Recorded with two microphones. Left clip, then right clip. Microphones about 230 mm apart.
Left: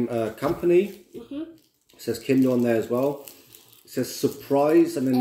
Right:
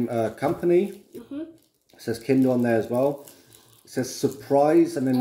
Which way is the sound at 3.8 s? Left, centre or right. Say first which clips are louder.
Even; centre.